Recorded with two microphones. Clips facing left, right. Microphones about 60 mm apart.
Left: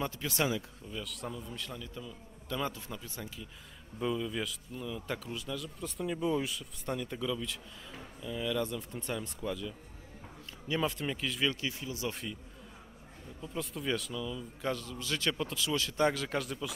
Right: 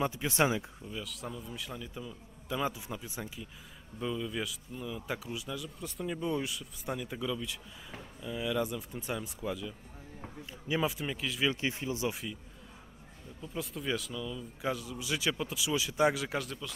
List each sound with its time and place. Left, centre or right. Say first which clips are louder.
0.0 s speech: right 4 dB; centre
0.8 s a man's voice: even; centre
4.0 s a man's voice: left 1 dB; centre
11.6 s speech: right 4 dB; right
12.1 s speech: right 1 dB; centre
13.4 s a man's voice: even; centre